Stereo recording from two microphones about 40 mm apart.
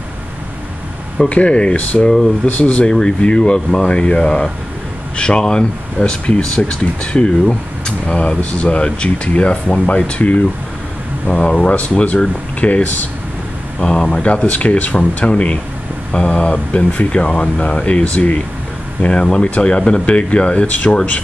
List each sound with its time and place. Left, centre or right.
1.3 s speech: left
1.8 s speech: left
2.9 s speech: centre
8.1 s speech: left
13.8 s speech: centre
16.1 s speech: left
19.0 s speech: left